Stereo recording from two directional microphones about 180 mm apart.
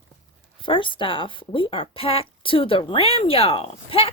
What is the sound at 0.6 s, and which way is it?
Speech, 25° left (ahead or behind).